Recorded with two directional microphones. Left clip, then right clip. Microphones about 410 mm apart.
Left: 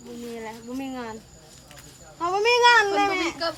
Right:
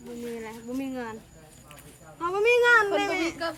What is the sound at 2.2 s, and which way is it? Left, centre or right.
Speech, centre.